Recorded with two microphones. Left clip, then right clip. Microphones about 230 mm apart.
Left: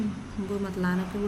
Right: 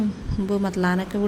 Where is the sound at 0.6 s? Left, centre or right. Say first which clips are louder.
Right 7 dB; right.